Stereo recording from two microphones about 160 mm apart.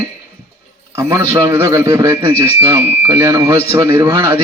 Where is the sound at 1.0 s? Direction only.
20° right (ahead or behind).